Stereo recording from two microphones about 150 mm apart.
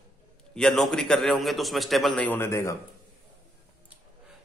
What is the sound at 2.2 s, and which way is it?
Speech, 15° left (ahead or behind).